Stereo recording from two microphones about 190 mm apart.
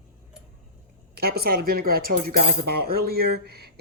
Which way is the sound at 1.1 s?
55° right (ahead or behind).